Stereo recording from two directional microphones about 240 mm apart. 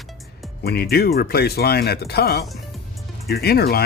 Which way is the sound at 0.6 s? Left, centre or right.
Left.